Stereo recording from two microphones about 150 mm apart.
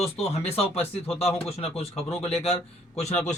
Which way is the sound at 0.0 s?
45° left (ahead or behind).